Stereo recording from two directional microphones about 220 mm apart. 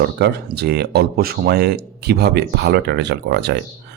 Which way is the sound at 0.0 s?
45° right (ahead or behind).